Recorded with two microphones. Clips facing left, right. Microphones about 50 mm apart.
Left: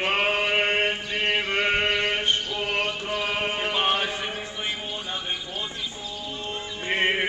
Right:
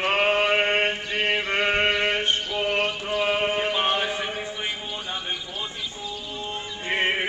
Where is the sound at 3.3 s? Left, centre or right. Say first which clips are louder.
Right 3 dB; centre.